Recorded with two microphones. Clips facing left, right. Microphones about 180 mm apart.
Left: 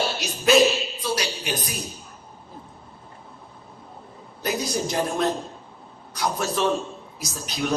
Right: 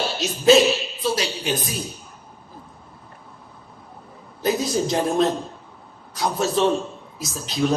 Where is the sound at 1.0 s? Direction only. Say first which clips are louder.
Right 5 dB; 25° right (ahead or behind).